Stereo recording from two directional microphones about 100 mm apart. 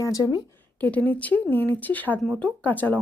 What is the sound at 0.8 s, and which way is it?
Speech, 15° left (ahead or behind).